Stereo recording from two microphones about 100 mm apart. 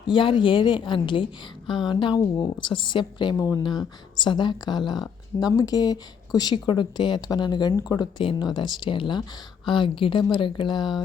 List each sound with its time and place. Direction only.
0.1 s a woman's voice: 55° left (ahead or behind)
3.3 s speech: 35° left (ahead or behind)
3.6 s speech: 50° left (ahead or behind)